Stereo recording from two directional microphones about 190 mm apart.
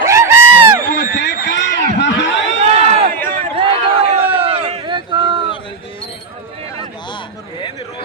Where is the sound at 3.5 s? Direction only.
30° right (ahead or behind).